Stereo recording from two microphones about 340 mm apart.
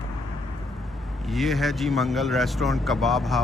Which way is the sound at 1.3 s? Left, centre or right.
Centre.